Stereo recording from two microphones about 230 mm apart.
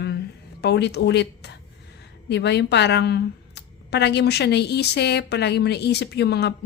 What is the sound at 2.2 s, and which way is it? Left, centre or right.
A woman's voice, left.